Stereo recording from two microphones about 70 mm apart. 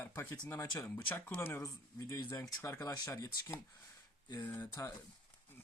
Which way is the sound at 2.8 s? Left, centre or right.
Left.